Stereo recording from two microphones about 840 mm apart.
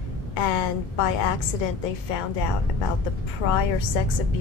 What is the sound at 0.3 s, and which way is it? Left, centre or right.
A woman's voice, left.